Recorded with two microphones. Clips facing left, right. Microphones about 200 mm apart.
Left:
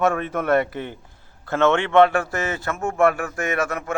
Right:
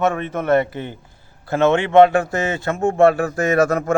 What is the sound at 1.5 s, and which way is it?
A man's voice, 15° right (ahead or behind).